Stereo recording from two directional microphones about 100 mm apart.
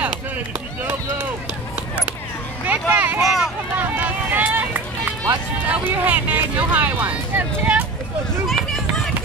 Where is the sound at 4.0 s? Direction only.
15° right (ahead or behind).